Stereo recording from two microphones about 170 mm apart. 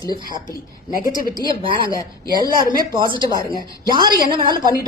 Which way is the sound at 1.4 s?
30° right (ahead or behind).